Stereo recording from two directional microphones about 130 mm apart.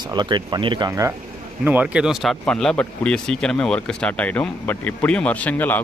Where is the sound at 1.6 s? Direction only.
10° right (ahead or behind).